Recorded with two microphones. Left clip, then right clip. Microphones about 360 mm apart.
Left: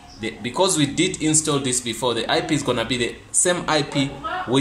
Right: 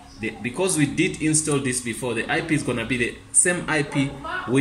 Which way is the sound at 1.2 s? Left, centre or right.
Left.